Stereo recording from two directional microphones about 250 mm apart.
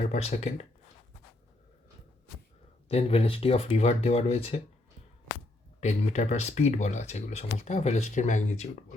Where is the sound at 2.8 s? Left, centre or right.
Left.